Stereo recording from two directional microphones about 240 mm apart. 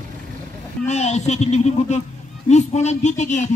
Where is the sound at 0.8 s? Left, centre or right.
Left.